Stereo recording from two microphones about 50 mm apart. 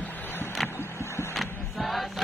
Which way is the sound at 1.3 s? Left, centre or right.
Centre.